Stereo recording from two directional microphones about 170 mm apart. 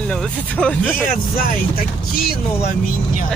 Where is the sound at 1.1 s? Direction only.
60° left (ahead or behind).